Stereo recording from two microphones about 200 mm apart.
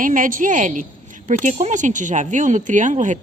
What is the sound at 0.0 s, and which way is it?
A woman's voice, 40° right (ahead or behind).